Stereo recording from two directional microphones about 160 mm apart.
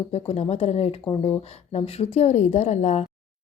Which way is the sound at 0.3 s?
40° left (ahead or behind).